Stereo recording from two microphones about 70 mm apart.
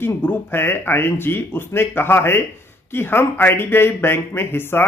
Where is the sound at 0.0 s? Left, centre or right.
Left.